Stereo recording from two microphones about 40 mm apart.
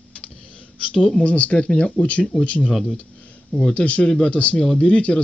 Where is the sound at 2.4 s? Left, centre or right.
Left.